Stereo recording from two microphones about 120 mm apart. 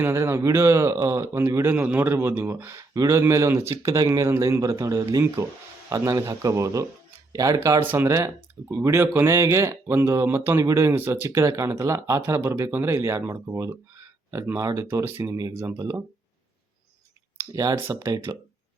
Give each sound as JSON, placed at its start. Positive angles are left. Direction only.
{"t": 0.0, "sound": "speech", "side_deg": -20}
{"t": 17.5, "sound": "speech", "side_deg": -30}